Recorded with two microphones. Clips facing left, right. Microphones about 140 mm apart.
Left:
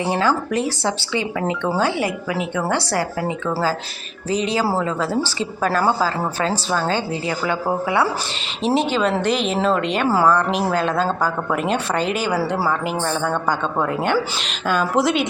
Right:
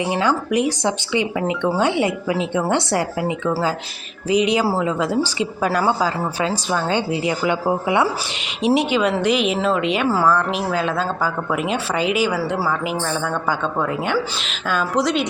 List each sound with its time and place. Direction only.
0.0 s a woman's voice: 15° right (ahead or behind); by 15.3 s centre (ahead or behind)